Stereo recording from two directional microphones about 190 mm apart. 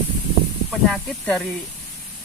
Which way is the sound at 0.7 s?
5° left (ahead or behind).